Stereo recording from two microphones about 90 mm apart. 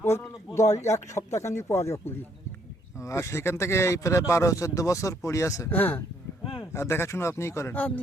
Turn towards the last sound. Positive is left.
turn(degrees=20)  # may be behind; listen again after turning